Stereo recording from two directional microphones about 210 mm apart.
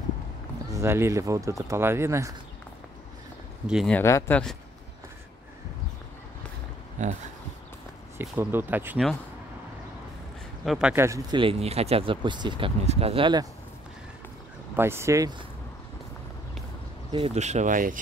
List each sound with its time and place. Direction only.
0.7 s speech: 10° right (ahead or behind)
3.6 s speech: centre (ahead or behind)
7.0 s a sound: 35° right (ahead or behind)
8.2 s speech: 10° right (ahead or behind)
10.6 s speech: centre (ahead or behind); by 13.5 s 20° right (ahead or behind)
14.8 s speech: 10° right (ahead or behind)
17.1 s speech: 30° right (ahead or behind)